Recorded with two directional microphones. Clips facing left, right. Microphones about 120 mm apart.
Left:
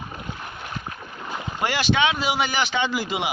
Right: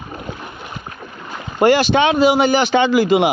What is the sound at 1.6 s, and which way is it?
Speech, 50° right (ahead or behind).